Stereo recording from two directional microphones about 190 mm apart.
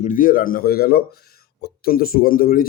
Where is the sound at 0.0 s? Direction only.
45° left (ahead or behind).